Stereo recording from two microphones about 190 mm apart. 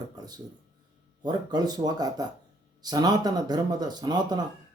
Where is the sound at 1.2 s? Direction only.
20° right (ahead or behind).